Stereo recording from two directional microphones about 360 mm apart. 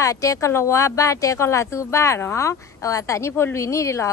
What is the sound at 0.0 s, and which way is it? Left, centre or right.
Speech, centre.